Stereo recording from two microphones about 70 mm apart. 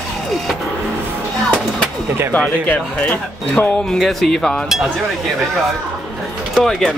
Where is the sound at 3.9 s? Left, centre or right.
Centre.